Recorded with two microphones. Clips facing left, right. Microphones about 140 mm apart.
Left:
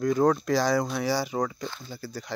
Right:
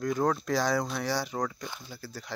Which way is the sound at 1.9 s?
Centre (ahead or behind).